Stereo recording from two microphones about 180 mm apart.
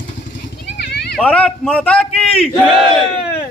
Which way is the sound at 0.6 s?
65° left (ahead or behind).